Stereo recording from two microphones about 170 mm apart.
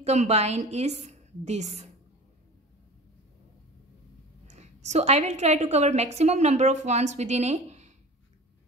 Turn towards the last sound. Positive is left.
turn(degrees=-40)  # may be behind; listen again after turning